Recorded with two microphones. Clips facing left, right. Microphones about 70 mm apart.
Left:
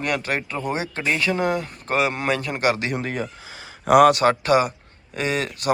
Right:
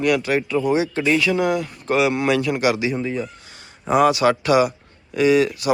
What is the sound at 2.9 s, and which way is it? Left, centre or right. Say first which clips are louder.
Speech: right 2 dB; left.